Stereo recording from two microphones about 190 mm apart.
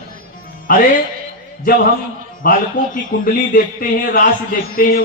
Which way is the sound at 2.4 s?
45° left (ahead or behind).